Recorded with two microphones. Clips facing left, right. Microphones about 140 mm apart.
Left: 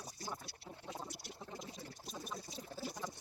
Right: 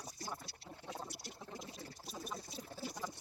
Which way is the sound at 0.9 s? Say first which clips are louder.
Right 1 dB; centre (ahead or behind).